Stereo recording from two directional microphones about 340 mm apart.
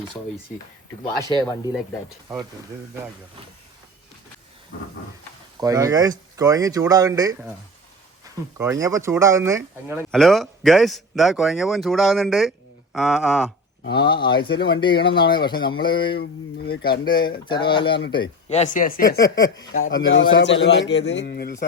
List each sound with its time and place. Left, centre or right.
1.4 s speech: centre
5.5 s speech: centre
13.8 s speech: left
14.1 s speech: centre
14.9 s speech: left
15.2 s speech: centre
16.0 s speech: left
17.1 s speech: centre
19.2 s speech: centre
20.1 s a man's voice: left